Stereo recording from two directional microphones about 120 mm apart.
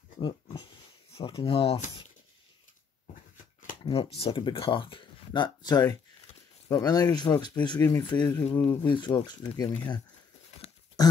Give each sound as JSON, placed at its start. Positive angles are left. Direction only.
{"t": 0.2, "sound": "speech", "side_deg": 40}
{"t": 3.8, "sound": "speech", "side_deg": 50}
{"t": 8.5, "sound": "speech", "side_deg": 15}
{"t": 8.9, "sound": "speech", "side_deg": 40}